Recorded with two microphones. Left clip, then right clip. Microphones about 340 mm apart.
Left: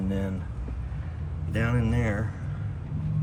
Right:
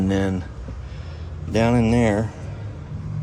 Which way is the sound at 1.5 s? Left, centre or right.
Centre.